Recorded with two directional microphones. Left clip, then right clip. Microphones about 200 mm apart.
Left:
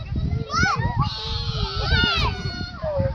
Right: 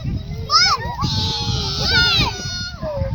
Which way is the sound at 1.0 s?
60° right (ahead or behind).